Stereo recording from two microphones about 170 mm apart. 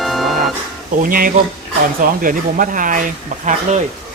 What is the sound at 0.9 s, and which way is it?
Speech, 55° right (ahead or behind).